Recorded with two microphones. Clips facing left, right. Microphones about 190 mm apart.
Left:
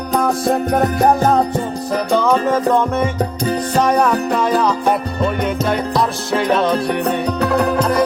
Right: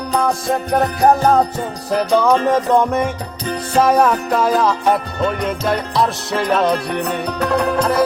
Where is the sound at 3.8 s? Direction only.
5° right (ahead or behind).